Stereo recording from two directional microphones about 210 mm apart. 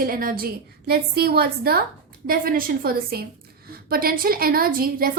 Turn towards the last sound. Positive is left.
turn(degrees=-45)  # may be behind; listen again after turning